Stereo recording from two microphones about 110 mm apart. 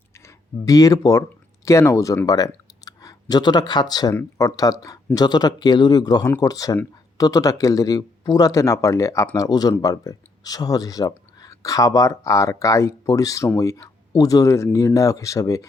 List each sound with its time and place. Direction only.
0.3 s speech: 30° left (ahead or behind)